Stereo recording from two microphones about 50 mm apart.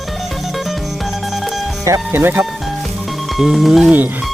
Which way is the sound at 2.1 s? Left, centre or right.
Right.